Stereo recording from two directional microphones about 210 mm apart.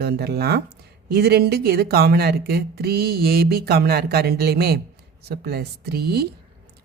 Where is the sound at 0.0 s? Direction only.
50° right (ahead or behind).